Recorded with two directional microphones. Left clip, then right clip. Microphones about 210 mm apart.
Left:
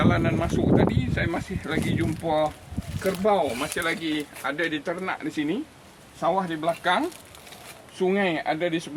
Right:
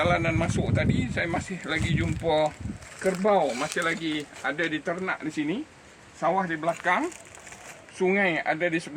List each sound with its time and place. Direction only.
0.0 s speech: 35° right (ahead or behind)
6.1 s speech: 5° right (ahead or behind)